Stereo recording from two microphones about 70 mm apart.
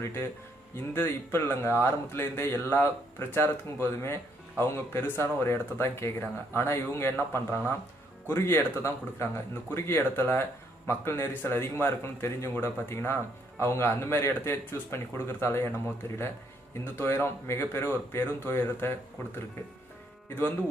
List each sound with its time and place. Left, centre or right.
0.0 s speech: left